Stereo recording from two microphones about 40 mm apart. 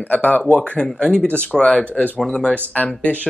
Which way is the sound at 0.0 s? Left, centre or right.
Left.